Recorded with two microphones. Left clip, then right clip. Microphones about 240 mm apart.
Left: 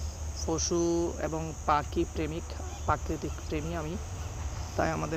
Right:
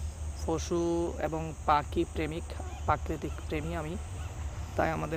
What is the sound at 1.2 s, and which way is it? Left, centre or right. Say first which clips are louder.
Speech: even; centre.